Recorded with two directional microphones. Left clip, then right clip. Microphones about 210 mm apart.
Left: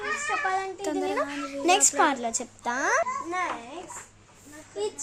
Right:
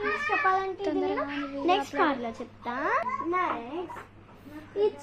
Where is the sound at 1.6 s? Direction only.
65° left (ahead or behind).